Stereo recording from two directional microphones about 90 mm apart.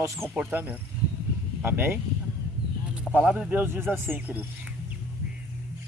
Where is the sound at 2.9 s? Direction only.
10° right (ahead or behind).